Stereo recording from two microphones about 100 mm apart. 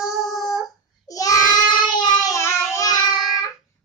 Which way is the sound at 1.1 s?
35° left (ahead or behind).